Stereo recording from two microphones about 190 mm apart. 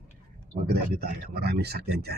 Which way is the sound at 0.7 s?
55° right (ahead or behind).